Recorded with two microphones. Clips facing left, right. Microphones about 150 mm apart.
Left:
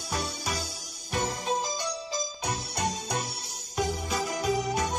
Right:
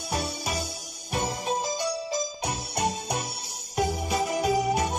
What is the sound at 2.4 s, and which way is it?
Music, 20° right (ahead or behind).